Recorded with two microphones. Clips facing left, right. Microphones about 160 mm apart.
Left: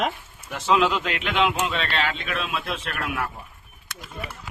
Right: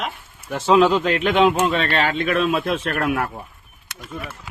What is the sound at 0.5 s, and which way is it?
Speech, 35° right (ahead or behind).